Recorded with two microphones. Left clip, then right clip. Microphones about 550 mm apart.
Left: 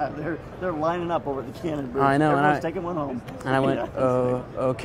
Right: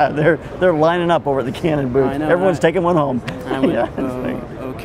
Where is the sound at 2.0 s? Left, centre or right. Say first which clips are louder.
Left 1 dB; left.